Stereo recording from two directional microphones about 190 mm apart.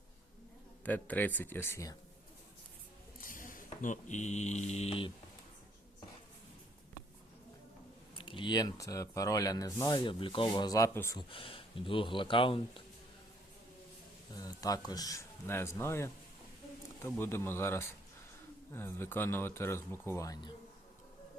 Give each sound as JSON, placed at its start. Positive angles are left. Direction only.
{"t": 0.9, "sound": "speech", "side_deg": 10}
{"t": 3.2, "sound": "a sound", "side_deg": 45}
{"t": 8.2, "sound": "speech", "side_deg": 25}
{"t": 14.3, "sound": "speech", "side_deg": 20}